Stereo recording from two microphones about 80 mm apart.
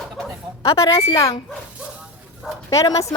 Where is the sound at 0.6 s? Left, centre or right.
Left.